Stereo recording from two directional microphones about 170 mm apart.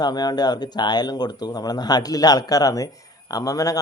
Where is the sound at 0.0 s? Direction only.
25° left (ahead or behind).